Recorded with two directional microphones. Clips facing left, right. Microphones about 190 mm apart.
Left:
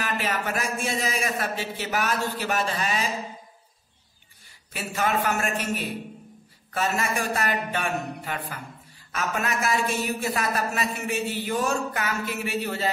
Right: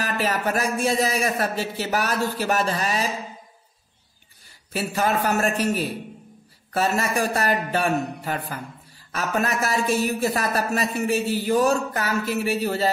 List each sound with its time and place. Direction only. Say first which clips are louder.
0.0 s speech: right 4 dB; 40° right (ahead or behind)
4.7 s speech: right 3 dB; 35° right (ahead or behind)